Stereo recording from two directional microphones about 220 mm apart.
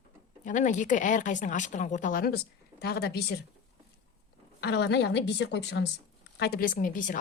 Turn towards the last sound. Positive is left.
turn(degrees=35)  # may be behind; listen again after turning